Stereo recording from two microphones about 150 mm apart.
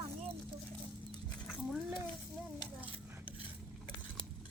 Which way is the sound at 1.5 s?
Centre (ahead or behind).